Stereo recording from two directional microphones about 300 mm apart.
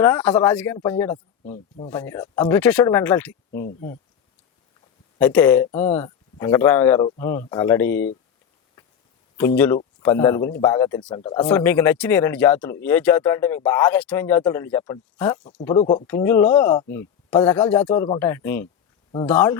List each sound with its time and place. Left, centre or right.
0.0 s speech: centre
1.5 s speech: left
1.9 s speech: centre
3.5 s speech: left
5.2 s speech: centre
9.6 s speech: centre
16.0 s speech: centre